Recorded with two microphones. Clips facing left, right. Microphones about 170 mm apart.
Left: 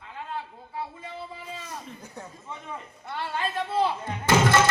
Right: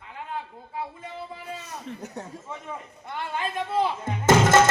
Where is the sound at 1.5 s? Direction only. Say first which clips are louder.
Right 2 dB; 70° right (ahead or behind).